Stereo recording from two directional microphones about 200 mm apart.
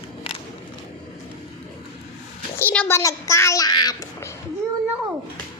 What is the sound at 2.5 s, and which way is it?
Speech, 10° left (ahead or behind).